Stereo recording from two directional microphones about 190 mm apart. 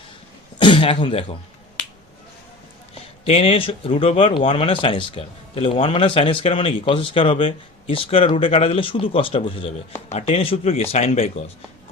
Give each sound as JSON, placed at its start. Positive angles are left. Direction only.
{"t": 0.6, "sound": "speech", "side_deg": 25}
{"t": 2.9, "sound": "speech", "side_deg": 30}